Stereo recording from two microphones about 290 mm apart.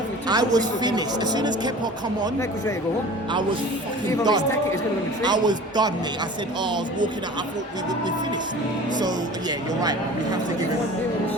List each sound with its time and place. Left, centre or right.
0.3 s speech: centre
4.2 s speech: centre